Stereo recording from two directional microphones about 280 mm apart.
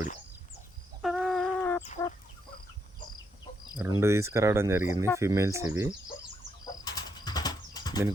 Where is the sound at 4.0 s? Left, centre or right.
Centre.